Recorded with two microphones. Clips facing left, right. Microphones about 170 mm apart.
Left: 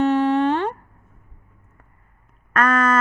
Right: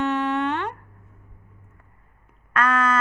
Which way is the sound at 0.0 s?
35° left (ahead or behind).